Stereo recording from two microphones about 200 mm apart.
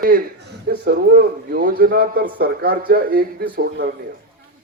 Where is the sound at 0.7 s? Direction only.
50° right (ahead or behind).